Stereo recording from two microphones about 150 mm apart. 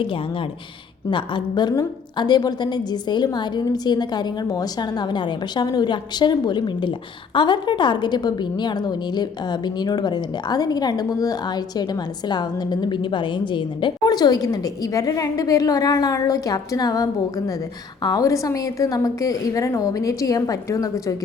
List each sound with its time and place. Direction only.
0.0 s a woman's voice: 35° left (ahead or behind)